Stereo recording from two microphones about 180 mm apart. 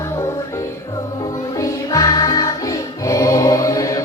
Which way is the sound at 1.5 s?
15° left (ahead or behind).